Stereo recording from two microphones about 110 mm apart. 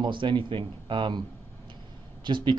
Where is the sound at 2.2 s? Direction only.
45° right (ahead or behind).